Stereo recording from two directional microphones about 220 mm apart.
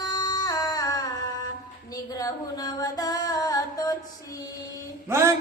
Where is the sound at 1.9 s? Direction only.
15° left (ahead or behind).